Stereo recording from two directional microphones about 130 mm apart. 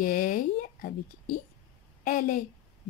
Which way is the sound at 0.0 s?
90° left.